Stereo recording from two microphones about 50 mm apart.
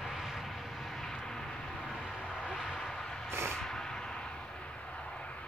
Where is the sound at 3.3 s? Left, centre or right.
Right.